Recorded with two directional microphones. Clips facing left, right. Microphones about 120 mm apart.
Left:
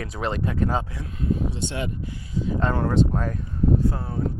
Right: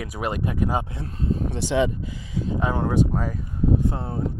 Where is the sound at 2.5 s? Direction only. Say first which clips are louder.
Even; 15° right (ahead or behind).